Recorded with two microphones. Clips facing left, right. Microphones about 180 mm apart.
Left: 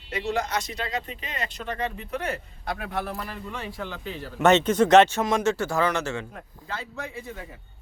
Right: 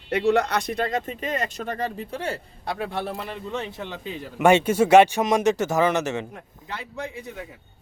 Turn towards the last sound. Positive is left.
turn(degrees=-15)  # may be behind; listen again after turning